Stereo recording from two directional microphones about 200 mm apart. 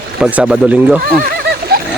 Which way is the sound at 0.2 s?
5° right (ahead or behind).